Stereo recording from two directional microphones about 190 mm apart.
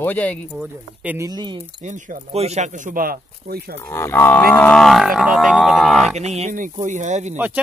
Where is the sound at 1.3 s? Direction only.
25° right (ahead or behind).